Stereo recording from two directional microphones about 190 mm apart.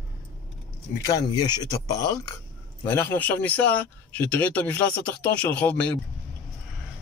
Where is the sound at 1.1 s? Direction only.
20° left (ahead or behind).